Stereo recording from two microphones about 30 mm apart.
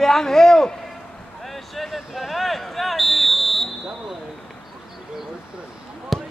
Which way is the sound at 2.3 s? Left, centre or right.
Centre.